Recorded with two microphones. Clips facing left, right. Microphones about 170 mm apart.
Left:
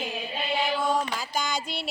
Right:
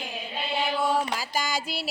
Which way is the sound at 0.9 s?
5° right (ahead or behind).